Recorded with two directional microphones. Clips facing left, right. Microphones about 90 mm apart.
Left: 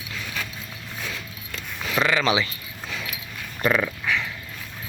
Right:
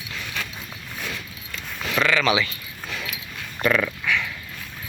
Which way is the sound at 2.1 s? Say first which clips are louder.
Right 2 dB; 30° left (ahead or behind).